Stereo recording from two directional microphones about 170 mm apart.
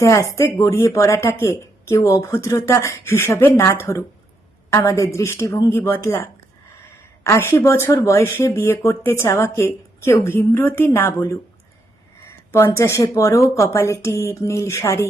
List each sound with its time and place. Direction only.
0.0 s speech: 20° left (ahead or behind)
7.3 s speech: 15° left (ahead or behind)